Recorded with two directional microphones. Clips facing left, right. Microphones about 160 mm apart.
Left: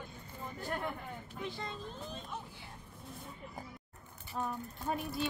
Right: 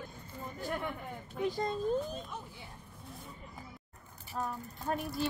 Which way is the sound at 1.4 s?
40° right (ahead or behind).